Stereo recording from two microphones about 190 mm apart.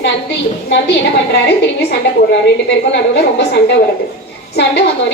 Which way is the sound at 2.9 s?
60° left (ahead or behind).